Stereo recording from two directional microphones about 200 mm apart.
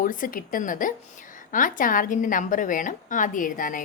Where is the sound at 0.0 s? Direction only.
45° left (ahead or behind).